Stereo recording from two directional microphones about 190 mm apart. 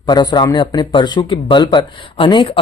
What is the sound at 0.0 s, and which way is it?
Speech, 20° left (ahead or behind).